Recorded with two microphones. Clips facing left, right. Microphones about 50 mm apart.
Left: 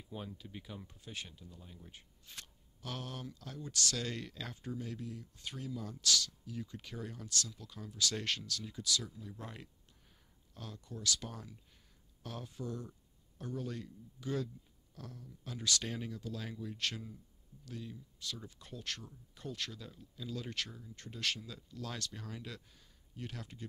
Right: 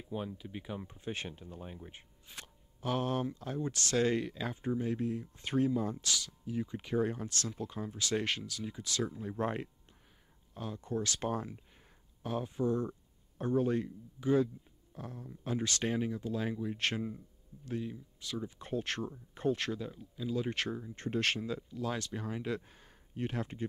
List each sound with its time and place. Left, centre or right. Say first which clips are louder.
0.1 s speech: right 6 dB; centre; by 1.9 s right
1.9 s speech: right 3 dB; right
4.2 s speech: right 8 dB; centre
8.8 s speech: right 4 dB; right
10.5 s speech: right 8 dB; right
10.9 s speech: right 7 dB; right
12.2 s speech: right 10 dB; right
15.9 s speech: right 8 dB; right
16.8 s speech: right 4 dB; right
18.6 s speech: right 9 dB; right
20.5 s speech: right 7 dB; right
21.7 s speech: right 4 dB; centre